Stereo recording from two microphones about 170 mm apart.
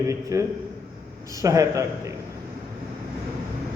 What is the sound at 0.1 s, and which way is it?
A man's voice, 20° right (ahead or behind).